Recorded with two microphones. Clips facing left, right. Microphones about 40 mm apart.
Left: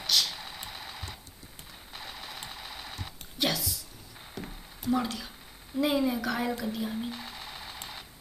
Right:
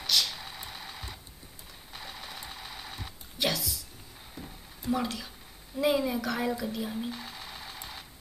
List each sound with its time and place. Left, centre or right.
0.0 s vehicle: centre
1.9 s sewing machine: centre
4.4 s a sound: left
4.9 s a woman's voice: centre
6.6 s sewing machine: centre